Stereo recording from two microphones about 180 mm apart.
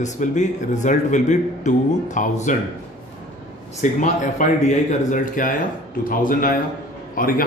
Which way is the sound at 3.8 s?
45° left (ahead or behind).